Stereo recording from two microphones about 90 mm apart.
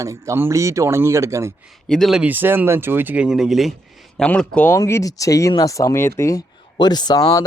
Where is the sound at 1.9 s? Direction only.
5° left (ahead or behind).